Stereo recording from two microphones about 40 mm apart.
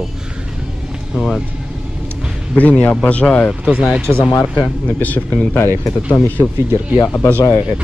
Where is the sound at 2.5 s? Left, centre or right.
Left.